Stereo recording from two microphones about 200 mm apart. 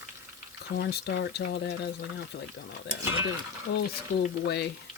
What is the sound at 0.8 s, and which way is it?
Speech, 55° left (ahead or behind).